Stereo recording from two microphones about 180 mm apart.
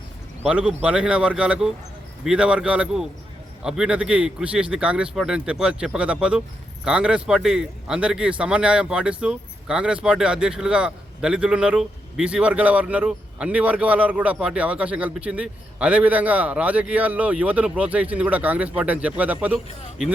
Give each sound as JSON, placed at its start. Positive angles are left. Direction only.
{"t": 0.4, "sound": "a man's voice", "side_deg": -5}